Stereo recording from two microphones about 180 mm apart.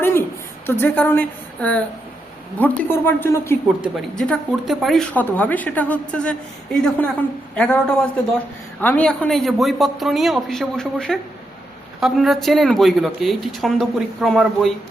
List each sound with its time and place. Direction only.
0.0 s a sound: 15° left (ahead or behind)
0.7 s a woman's voice: 10° left (ahead or behind)
3.8 s speech: 5° left (ahead or behind)